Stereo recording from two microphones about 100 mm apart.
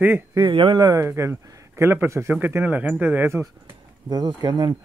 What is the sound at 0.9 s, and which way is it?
A man's voice, 30° right (ahead or behind).